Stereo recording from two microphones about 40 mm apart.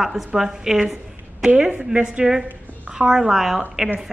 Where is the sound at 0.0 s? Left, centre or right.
Centre.